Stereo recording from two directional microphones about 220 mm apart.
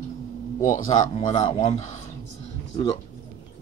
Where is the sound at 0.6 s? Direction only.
35° left (ahead or behind).